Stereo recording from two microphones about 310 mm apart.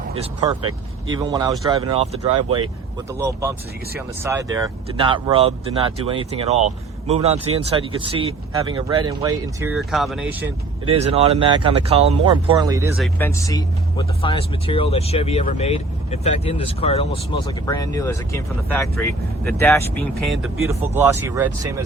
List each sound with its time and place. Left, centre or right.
1.1 s speech: centre
10.8 s speech: centre
13.0 s speech: centre